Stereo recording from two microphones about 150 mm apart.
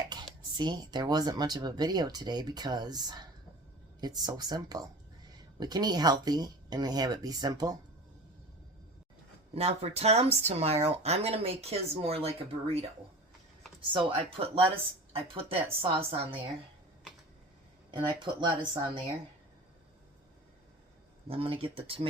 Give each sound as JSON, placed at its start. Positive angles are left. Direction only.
{"t": 0.1, "sound": "speech", "side_deg": -30}
{"t": 9.6, "sound": "speech", "side_deg": -45}
{"t": 13.9, "sound": "speech", "side_deg": -40}
{"t": 18.2, "sound": "speech", "side_deg": -30}
{"t": 21.2, "sound": "speech", "side_deg": -35}